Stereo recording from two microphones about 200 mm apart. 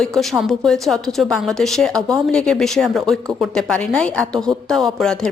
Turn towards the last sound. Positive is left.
turn(degrees=0)  # may be behind; listen again after turning